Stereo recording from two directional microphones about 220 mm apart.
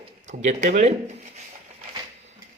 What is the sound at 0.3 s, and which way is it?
A man's voice, 35° right (ahead or behind).